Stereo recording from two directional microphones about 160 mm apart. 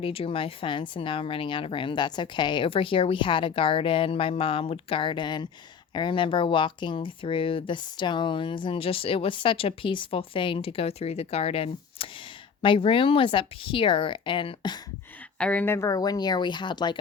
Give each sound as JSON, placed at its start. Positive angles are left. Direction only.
{"t": 0.0, "sound": "speech", "side_deg": 35}
{"t": 15.4, "sound": "speech", "side_deg": 10}